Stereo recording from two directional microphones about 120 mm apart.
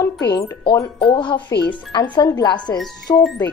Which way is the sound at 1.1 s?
40° left (ahead or behind).